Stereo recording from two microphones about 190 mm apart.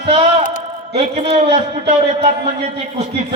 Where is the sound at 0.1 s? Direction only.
30° right (ahead or behind).